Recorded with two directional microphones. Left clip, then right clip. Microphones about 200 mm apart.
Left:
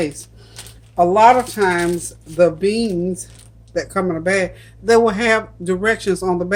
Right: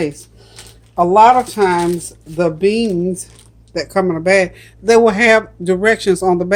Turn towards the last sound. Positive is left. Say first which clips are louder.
# right 5 dB
turn(degrees=-30)  # may be behind; listen again after turning